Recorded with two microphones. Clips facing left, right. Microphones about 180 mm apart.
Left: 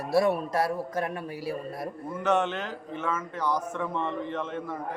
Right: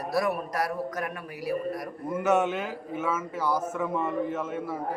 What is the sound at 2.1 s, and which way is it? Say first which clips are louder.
A man's voice: right 2 dB; 10° right (ahead or behind).